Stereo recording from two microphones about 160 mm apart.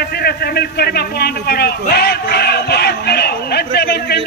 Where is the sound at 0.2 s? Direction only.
80° left.